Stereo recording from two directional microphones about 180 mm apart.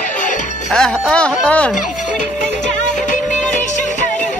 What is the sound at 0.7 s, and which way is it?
Music, centre (ahead or behind).